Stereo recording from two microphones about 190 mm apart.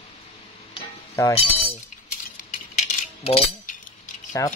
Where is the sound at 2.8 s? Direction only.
35° left (ahead or behind).